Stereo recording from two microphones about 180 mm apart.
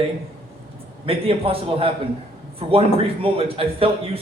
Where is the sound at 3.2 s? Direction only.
30° right (ahead or behind).